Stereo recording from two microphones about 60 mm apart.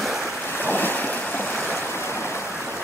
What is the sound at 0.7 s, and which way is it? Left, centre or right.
Waves, left.